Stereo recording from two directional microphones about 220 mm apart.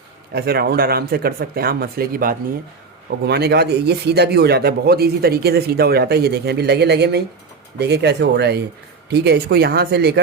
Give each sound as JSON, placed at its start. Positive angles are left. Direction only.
{"t": 0.3, "sound": "speech", "side_deg": -45}